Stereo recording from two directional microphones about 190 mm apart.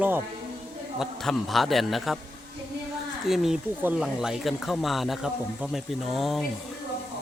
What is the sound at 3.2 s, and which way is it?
Speech, centre (ahead or behind).